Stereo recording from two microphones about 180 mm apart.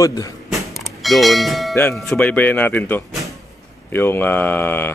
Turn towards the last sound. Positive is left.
turn(degrees=10)  # may be behind; listen again after turning